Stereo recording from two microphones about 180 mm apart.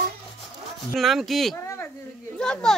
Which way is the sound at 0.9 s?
Centre (ahead or behind).